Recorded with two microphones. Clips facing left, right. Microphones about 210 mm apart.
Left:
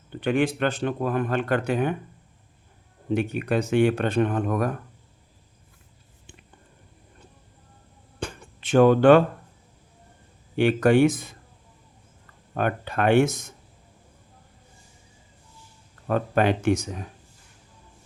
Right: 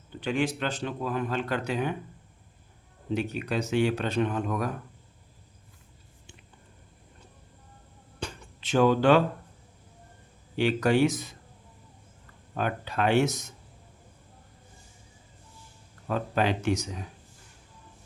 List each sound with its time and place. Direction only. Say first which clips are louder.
0.1 s speech: left 5 dB; 55° left (ahead or behind)
3.2 s speech: left 5 dB; 55° left (ahead or behind)
8.2 s a sound: left 4 dB; 50° left (ahead or behind)
10.6 s speech: left 5 dB; 55° left (ahead or behind)
12.5 s speech: left 4 dB; 55° left (ahead or behind)
16.0 s speech: left 5 dB; 55° left (ahead or behind)